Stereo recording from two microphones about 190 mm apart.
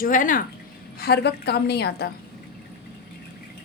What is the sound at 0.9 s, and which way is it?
A woman's voice, 55° left (ahead or behind).